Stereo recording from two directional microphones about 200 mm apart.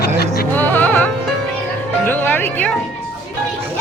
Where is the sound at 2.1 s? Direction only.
10° left (ahead or behind).